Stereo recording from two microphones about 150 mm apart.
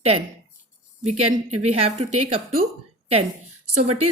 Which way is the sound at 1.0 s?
45° right (ahead or behind).